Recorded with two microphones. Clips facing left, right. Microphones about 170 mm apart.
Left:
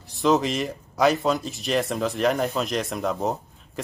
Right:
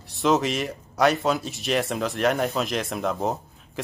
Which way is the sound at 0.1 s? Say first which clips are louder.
Left 1 dB; centre (ahead or behind).